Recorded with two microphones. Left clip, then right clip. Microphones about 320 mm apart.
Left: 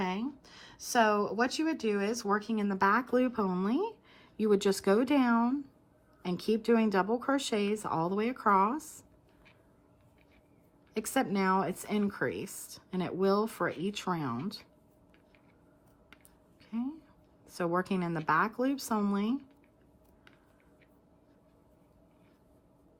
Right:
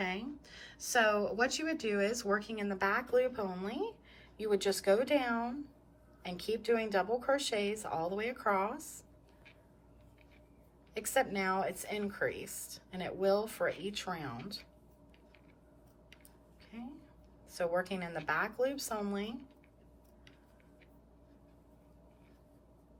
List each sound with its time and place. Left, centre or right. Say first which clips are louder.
0.0 s speech: left 3 dB; centre
10.9 s speech: left 1 dB; centre
17.5 s speech: left 2 dB; centre